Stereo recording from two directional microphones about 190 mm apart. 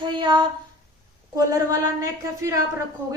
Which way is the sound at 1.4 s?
15° right (ahead or behind).